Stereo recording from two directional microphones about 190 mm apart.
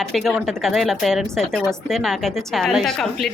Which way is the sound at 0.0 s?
Centre (ahead or behind).